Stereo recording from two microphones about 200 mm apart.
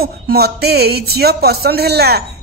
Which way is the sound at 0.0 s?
50° right (ahead or behind).